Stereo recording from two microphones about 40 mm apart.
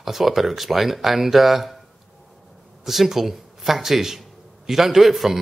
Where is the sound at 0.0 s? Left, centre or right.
Centre.